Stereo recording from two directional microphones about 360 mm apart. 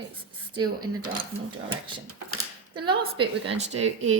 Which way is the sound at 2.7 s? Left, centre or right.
Centre.